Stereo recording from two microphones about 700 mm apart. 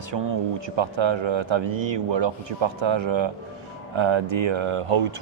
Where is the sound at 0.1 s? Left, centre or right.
Right.